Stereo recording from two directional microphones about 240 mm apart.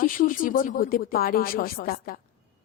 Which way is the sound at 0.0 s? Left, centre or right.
Left.